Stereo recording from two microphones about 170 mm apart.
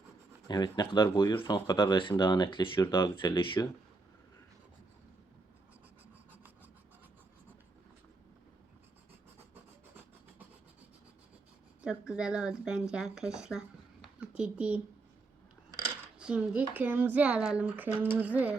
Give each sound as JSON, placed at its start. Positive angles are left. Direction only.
{"t": 0.4, "sound": "speech", "side_deg": 25}
{"t": 11.8, "sound": "speech", "side_deg": -5}
{"t": 16.1, "sound": "speech", "side_deg": -5}